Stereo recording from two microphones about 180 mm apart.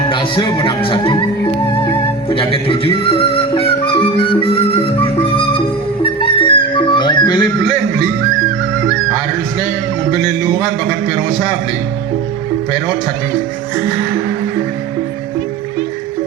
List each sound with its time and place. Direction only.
0.1 s music: 30° left (ahead or behind)
2.3 s music: 30° left (ahead or behind)
10.1 s music: 25° left (ahead or behind)